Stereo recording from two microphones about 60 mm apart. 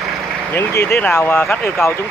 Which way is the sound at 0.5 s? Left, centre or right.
Left.